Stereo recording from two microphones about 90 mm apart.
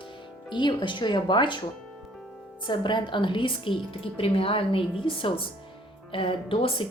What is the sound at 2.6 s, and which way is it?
Speech, 60° left (ahead or behind).